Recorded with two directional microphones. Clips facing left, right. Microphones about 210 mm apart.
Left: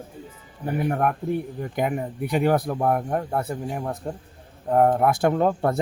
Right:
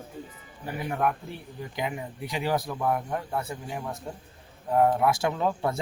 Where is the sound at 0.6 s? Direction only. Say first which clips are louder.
Left 5 dB; 50° left (ahead or behind).